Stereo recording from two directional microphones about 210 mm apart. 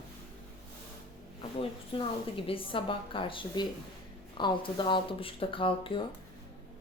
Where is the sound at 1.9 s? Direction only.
25° left (ahead or behind).